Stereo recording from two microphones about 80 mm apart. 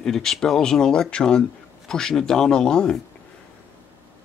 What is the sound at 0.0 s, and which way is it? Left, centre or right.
Speech, centre.